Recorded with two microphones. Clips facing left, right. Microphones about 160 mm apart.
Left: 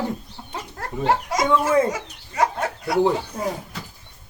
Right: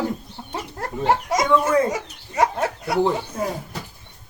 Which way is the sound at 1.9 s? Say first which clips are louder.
Right 2 dB; 20° right (ahead or behind).